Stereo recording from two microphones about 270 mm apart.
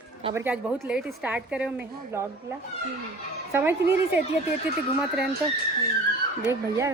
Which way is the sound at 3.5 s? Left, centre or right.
Centre.